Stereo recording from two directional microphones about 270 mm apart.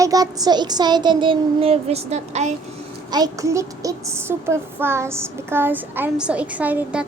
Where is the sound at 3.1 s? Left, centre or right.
Centre.